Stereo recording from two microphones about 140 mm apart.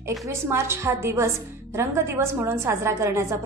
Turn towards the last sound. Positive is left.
turn(degrees=-20)  # may be behind; listen again after turning